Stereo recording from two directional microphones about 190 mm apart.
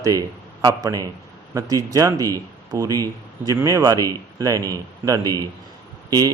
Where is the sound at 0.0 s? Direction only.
15° right (ahead or behind).